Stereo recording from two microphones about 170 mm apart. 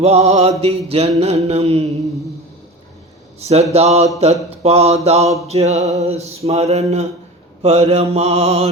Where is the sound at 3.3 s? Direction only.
40° right (ahead or behind).